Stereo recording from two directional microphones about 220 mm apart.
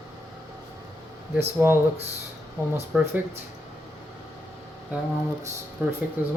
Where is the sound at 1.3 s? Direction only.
10° right (ahead or behind).